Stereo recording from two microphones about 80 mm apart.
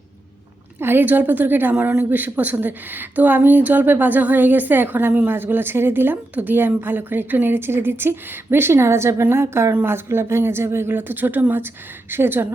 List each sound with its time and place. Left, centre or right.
0.8 s a woman's voice: right